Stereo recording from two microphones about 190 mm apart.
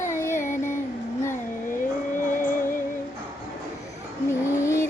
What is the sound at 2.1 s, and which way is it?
Music, 45° left (ahead or behind).